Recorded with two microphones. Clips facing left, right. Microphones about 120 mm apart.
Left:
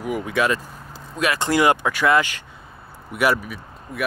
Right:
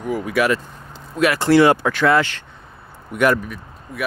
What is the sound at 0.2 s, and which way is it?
Speech, 25° left (ahead or behind).